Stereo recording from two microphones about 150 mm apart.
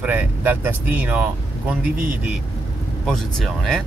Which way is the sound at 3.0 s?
5° left (ahead or behind).